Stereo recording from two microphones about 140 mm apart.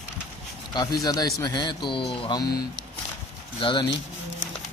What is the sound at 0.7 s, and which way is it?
Speech, 30° left (ahead or behind).